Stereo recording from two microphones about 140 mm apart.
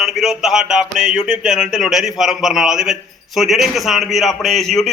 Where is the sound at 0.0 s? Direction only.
Centre (ahead or behind).